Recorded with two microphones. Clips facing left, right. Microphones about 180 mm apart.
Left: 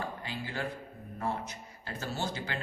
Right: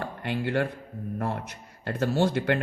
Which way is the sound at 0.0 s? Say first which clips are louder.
Right 8 dB; 65° right (ahead or behind).